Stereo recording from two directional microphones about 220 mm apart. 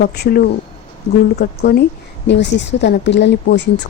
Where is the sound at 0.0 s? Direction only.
45° left (ahead or behind).